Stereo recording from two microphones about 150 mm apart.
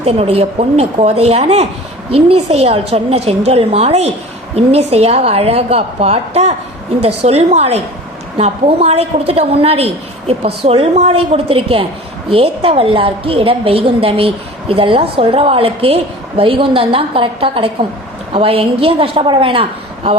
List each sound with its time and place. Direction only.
0.0 s a woman's voice: 40° right (ahead or behind)